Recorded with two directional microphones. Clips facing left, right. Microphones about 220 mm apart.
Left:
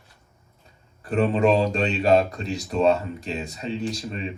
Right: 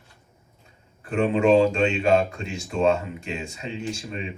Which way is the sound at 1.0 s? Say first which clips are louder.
Left 1 dB; 35° left (ahead or behind).